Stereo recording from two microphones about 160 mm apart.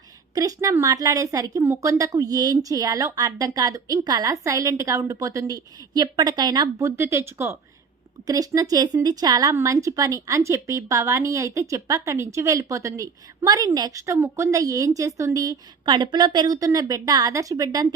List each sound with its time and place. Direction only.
0.3 s speech: 20° right (ahead or behind)